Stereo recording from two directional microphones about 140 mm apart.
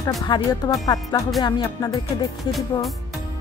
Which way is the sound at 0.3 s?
35° left (ahead or behind).